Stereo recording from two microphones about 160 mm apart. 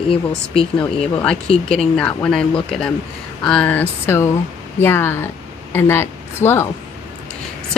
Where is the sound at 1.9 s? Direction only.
10° left (ahead or behind).